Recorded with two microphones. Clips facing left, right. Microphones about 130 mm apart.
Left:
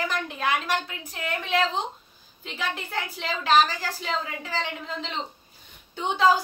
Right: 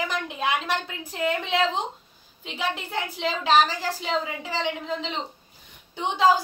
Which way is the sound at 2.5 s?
20° right (ahead or behind).